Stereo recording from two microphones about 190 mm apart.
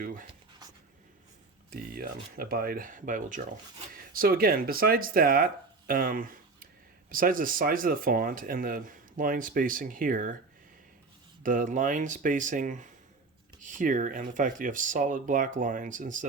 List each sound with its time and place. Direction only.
1.7 s speech: 50° right (ahead or behind)
5.9 s a sound: 50° right (ahead or behind)
7.1 s speech: 45° right (ahead or behind)
11.4 s speech: 45° right (ahead or behind)